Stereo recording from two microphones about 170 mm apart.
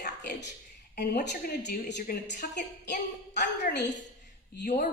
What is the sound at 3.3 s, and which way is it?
Speech, 85° left.